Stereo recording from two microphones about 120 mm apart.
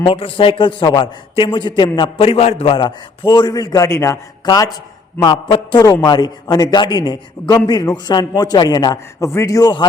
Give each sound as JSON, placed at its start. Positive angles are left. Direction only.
{"t": 0.0, "sound": "a man's voice", "side_deg": 50}
{"t": 2.7, "sound": "a man's voice", "side_deg": 35}
{"t": 5.2, "sound": "a man's voice", "side_deg": 45}
{"t": 5.8, "sound": "a man's voice", "side_deg": 30}